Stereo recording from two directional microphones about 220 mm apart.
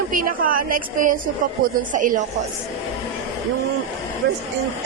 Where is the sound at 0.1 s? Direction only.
40° right (ahead or behind).